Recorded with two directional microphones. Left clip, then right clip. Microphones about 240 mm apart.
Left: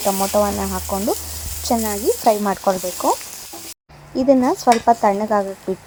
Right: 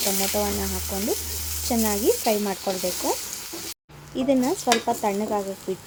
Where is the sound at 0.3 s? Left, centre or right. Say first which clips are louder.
Left 10 dB; left.